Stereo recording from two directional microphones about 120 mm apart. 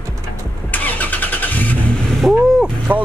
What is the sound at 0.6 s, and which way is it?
Vehicle, 15° left (ahead or behind).